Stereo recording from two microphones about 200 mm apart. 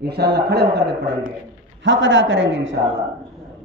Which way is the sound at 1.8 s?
70° right (ahead or behind).